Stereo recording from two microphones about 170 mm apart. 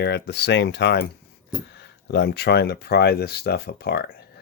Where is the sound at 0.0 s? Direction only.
85° left.